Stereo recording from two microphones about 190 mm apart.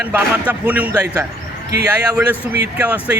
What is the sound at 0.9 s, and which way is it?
Speech, 20° right (ahead or behind).